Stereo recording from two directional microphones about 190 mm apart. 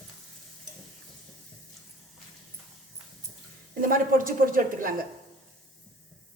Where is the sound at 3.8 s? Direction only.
45° right (ahead or behind).